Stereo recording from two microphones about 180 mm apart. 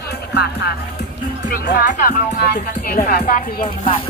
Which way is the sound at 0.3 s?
65° left (ahead or behind).